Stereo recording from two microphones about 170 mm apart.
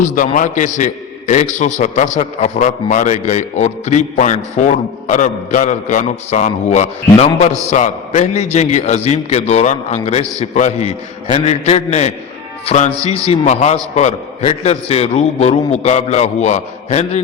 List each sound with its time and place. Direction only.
0.3 s a man's voice: 50° left (ahead or behind)